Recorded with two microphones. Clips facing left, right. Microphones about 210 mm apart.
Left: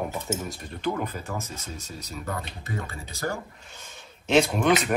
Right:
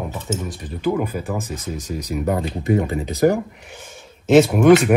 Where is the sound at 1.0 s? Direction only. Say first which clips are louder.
Right 8 dB; 15° right (ahead or behind).